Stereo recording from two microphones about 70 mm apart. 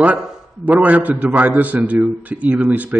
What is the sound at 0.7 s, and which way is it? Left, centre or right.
A man's voice, right.